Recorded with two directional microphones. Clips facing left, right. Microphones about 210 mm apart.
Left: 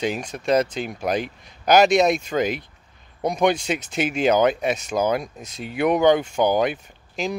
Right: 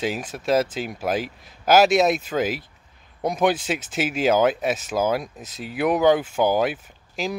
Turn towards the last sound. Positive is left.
turn(degrees=-5)  # may be behind; listen again after turning